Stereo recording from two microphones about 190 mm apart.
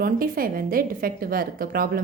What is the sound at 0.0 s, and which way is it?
A woman's voice, 50° right (ahead or behind).